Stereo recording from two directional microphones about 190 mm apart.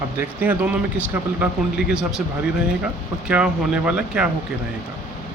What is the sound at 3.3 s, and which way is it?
Speech, 5° right (ahead or behind).